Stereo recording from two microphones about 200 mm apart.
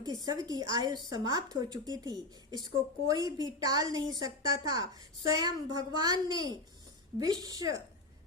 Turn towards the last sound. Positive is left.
turn(degrees=-20)  # may be behind; listen again after turning